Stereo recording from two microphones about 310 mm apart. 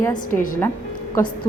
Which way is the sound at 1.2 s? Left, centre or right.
Centre.